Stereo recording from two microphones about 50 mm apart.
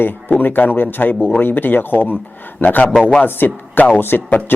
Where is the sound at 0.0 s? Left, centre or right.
Left.